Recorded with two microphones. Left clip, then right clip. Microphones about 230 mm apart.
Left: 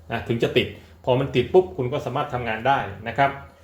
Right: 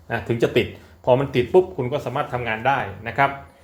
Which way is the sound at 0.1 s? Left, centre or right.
Right.